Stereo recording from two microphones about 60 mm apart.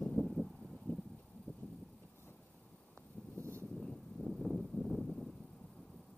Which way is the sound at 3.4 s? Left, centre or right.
Right.